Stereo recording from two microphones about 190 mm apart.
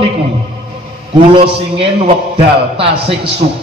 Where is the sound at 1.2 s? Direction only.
30° right (ahead or behind).